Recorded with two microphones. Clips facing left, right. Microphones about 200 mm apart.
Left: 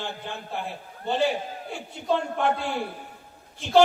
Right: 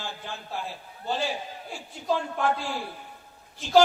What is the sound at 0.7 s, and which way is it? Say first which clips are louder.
A man's voice: left 4 dB; 60° left (ahead or behind).